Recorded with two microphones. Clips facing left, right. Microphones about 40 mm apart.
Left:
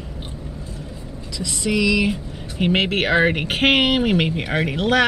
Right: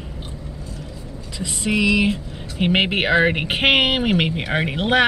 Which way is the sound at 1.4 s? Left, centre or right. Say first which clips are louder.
Even; right.